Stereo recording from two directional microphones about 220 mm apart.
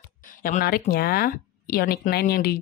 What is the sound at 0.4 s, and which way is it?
Speech, 40° left (ahead or behind).